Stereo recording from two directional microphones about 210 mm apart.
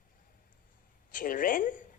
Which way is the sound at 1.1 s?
40° left (ahead or behind).